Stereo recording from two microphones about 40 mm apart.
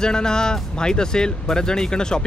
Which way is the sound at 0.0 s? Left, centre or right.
Centre.